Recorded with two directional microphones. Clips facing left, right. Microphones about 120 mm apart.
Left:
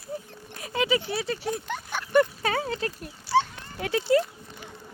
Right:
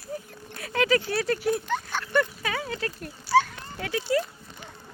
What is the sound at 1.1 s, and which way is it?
Speech, 5° left (ahead or behind).